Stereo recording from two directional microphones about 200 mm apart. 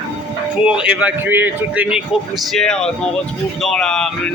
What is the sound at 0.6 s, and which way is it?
A man's voice, 5° right (ahead or behind).